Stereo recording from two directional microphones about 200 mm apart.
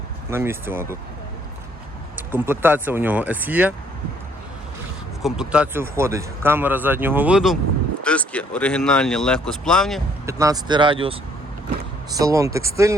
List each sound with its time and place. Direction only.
0.3 s speech: 10° right (ahead or behind)
2.3 s speech: 10° right (ahead or behind)
5.2 s speech: 5° right (ahead or behind)
10.2 s speech: 15° right (ahead or behind)
12.1 s speech: 15° right (ahead or behind)